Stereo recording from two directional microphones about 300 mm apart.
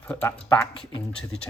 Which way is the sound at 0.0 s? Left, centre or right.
Centre.